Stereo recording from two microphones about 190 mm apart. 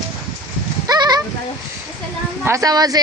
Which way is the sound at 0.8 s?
20° right (ahead or behind).